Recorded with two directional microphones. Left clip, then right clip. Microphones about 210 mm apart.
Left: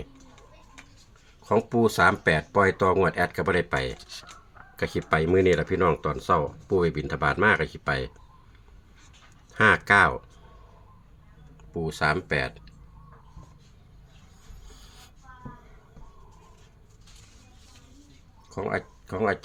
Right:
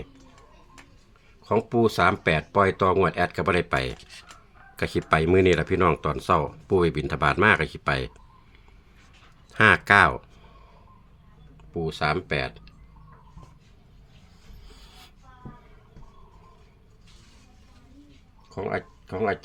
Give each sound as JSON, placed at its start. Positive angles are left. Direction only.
{"t": 1.5, "sound": "speech", "side_deg": 0}
{"t": 9.5, "sound": "speech", "side_deg": -15}
{"t": 11.7, "sound": "speech", "side_deg": 0}
{"t": 14.7, "sound": "a sound", "side_deg": -5}
{"t": 18.5, "sound": "speech", "side_deg": 5}